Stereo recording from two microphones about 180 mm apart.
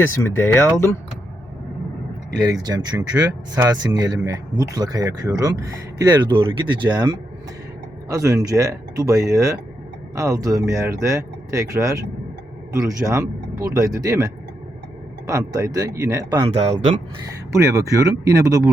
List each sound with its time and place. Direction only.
0.2 s speech: 15° left (ahead or behind)
2.5 s speech: 20° right (ahead or behind)
16.5 s speech: 35° right (ahead or behind)
17.5 s speech: 15° right (ahead or behind)